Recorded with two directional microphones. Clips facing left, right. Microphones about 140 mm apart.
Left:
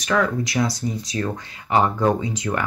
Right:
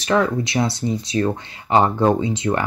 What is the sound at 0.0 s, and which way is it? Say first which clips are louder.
Speech: right 2 dB; 25° right (ahead or behind).